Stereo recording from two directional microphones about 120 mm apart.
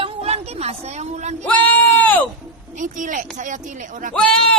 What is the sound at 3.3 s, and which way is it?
Speech, 90° right.